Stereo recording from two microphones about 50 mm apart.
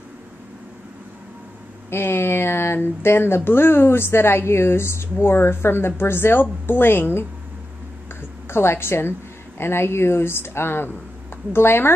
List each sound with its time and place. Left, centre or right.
1.9 s speech: left
8.5 s speech: left